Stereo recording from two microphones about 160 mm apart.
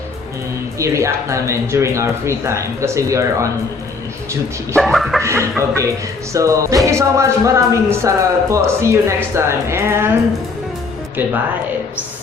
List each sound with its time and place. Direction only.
0.8 s music: 20° right (ahead or behind)
4.8 s music: centre (ahead or behind)
5.2 s music: 15° right (ahead or behind)
11.2 s music: 10° right (ahead or behind)